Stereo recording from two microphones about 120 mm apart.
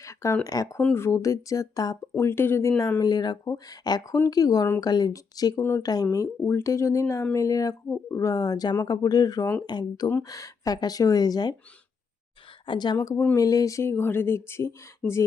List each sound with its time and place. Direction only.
0.0 s a sound: 25° left (ahead or behind)
0.4 s speech: 30° left (ahead or behind)
12.6 s speech: 40° left (ahead or behind)
13.0 s speech: 20° left (ahead or behind)